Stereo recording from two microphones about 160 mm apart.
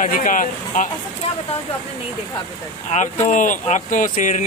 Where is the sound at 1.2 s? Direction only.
40° left (ahead or behind).